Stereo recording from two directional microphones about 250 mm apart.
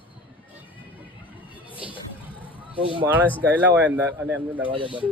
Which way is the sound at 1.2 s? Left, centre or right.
Left.